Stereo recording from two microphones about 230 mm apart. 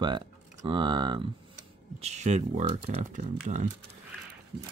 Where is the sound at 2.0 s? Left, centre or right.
Right.